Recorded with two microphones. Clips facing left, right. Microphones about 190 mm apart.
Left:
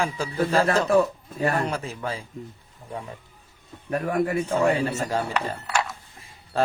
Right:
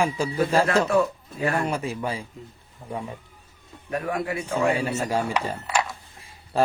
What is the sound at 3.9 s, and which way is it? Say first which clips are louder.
Speech: left 3 dB; 45° left (ahead or behind).